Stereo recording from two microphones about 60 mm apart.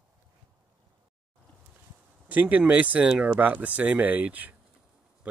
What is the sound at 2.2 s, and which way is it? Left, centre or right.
Speech, right.